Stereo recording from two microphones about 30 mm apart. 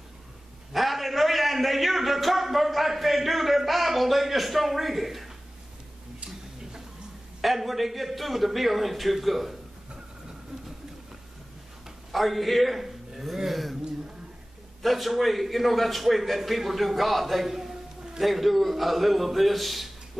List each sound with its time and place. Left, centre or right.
0.7 s a sound: centre
6.2 s tick-tock: right
7.4 s a man's voice: centre
12.1 s a man's voice: centre
14.8 s a man's voice: centre
17.5 s a sound: centre
18.2 s a man's voice: centre